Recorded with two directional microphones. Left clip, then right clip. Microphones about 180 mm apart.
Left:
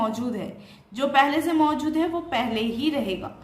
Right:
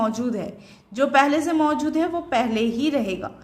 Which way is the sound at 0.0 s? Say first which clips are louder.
Right 3 dB; 30° right (ahead or behind).